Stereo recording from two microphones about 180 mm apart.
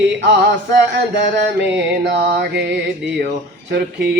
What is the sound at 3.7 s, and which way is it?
Speech, 65° right (ahead or behind).